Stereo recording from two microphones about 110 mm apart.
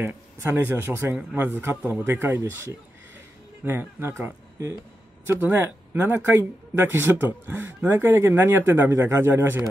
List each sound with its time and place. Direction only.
0.0 s speech: 20° right (ahead or behind)